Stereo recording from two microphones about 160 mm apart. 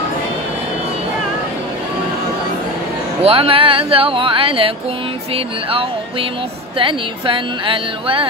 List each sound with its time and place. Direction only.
3.2 s speech: 35° right (ahead or behind)